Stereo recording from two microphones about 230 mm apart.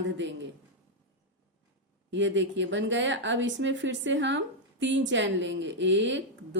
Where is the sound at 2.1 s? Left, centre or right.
Right.